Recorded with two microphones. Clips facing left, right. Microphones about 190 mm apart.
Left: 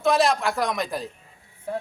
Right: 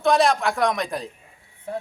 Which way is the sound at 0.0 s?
Centre (ahead or behind).